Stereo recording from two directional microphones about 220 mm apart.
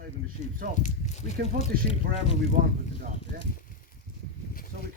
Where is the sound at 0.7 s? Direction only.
35° left (ahead or behind).